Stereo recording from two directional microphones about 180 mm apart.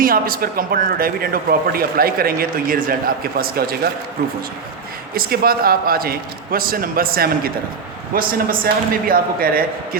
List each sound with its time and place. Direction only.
0.0 s speech: 55° right (ahead or behind)
5.1 s a man's voice: 55° right (ahead or behind)